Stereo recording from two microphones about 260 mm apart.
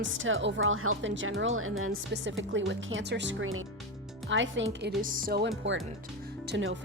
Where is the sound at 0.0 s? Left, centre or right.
Right.